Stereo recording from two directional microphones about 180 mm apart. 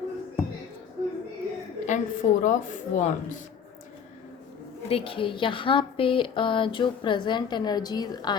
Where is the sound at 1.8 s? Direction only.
45° left (ahead or behind).